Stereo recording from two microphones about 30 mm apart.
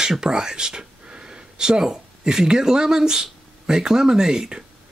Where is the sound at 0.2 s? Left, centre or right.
Centre.